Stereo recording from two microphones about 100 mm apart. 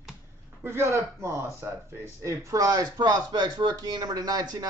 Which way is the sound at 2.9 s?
45° right (ahead or behind).